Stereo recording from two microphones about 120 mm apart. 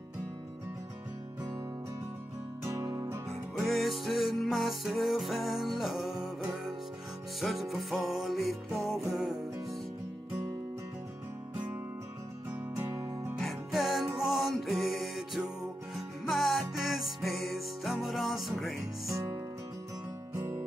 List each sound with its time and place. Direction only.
2.6 s music: 25° right (ahead or behind)
3.5 s music: centre (ahead or behind)
12.8 s music: 25° right (ahead or behind)
13.4 s music: centre (ahead or behind)
19.0 s music: 25° right (ahead or behind)